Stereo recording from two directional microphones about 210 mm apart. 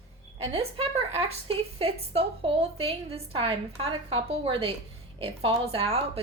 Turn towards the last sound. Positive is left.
turn(degrees=-30)  # may be behind; listen again after turning